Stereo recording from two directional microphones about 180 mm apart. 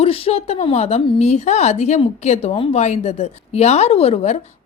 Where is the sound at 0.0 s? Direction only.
35° left (ahead or behind).